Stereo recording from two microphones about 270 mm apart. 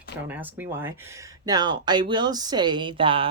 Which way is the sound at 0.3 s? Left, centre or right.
Centre.